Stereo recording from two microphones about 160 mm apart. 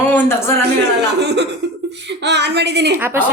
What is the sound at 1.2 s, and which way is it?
Speech, 90° right.